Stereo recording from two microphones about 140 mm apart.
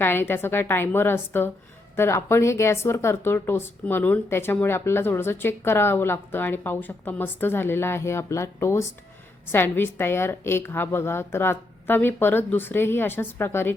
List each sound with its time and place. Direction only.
0.0 s speech: 15° left (ahead or behind)